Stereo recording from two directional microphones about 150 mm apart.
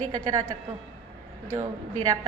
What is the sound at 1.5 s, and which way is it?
Speech, 25° right (ahead or behind).